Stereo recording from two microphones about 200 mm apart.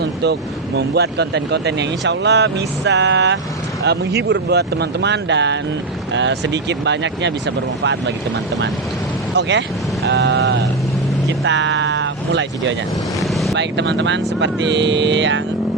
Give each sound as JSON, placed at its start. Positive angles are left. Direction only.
{"t": 0.8, "sound": "speech", "side_deg": -55}
{"t": 9.3, "sound": "speech", "side_deg": -60}
{"t": 13.2, "sound": "vehicle", "side_deg": 0}
{"t": 13.6, "sound": "speech", "side_deg": -60}